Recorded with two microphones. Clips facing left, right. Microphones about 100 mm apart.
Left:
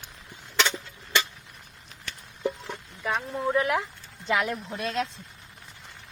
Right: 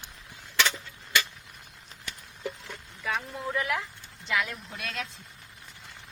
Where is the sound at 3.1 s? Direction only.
35° left (ahead or behind).